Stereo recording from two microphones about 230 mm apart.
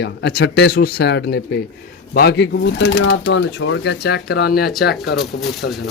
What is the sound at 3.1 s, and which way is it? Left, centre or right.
Speech, left.